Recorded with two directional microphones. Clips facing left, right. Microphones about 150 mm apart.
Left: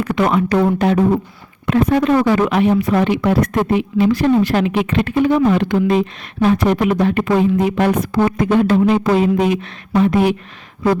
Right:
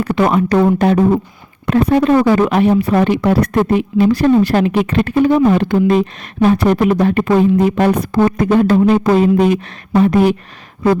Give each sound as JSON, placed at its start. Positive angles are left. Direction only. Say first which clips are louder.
{"t": 0.0, "sound": "speech", "louder": "right 2 dB", "side_deg": -35}